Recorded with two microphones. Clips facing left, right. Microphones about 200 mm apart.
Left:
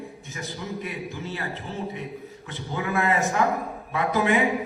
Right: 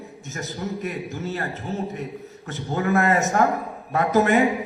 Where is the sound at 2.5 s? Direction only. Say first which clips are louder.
Right 6 dB; 45° right (ahead or behind).